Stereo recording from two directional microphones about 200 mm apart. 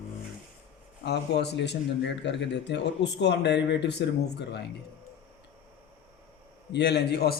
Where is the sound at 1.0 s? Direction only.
55° left (ahead or behind).